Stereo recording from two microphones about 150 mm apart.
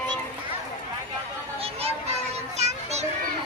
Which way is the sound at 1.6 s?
40° right (ahead or behind).